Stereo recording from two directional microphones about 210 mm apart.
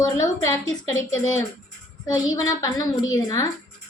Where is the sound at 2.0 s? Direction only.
15° left (ahead or behind).